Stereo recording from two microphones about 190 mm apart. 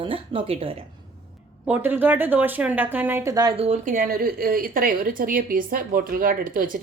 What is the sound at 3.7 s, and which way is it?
A woman's voice, 45° right (ahead or behind).